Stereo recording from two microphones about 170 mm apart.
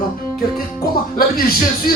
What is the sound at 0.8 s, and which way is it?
Speech, 60° left (ahead or behind).